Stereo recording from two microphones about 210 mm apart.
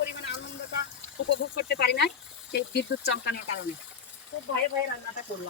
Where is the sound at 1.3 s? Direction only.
55° left (ahead or behind).